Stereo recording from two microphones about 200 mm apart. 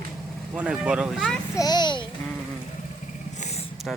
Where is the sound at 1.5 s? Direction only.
20° left (ahead or behind).